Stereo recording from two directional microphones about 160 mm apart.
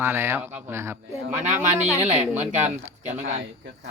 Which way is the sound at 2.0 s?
45° right (ahead or behind).